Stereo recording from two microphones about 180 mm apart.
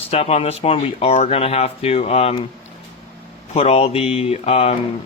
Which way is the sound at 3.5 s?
35° left (ahead or behind).